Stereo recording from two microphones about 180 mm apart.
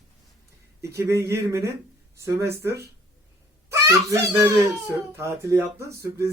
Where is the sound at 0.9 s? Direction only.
15° right (ahead or behind).